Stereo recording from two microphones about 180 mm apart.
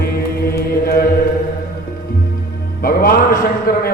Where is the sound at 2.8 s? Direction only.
55° left (ahead or behind).